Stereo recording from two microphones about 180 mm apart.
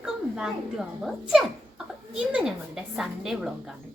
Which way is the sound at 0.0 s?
5° right (ahead or behind).